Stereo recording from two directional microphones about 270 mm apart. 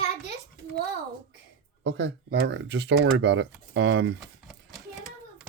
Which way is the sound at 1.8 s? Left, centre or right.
Right.